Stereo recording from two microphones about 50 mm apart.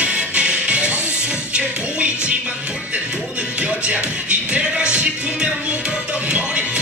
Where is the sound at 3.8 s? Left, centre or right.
Right.